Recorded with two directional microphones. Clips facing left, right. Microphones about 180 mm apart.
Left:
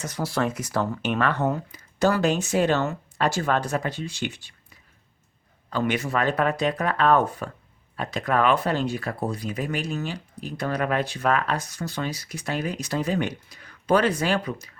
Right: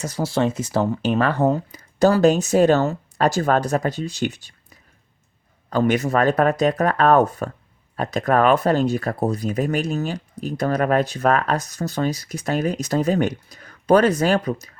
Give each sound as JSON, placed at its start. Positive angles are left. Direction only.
{"t": 0.0, "sound": "speech", "side_deg": -25}